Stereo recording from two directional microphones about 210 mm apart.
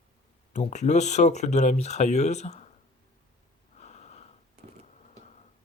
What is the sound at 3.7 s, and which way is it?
Snort, 30° left (ahead or behind).